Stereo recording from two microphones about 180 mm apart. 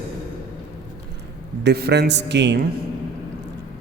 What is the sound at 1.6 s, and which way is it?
A man's voice, 65° right (ahead or behind).